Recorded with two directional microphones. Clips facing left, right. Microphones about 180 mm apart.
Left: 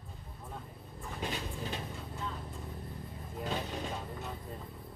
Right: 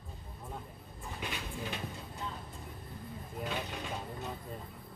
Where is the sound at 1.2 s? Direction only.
35° left (ahead or behind).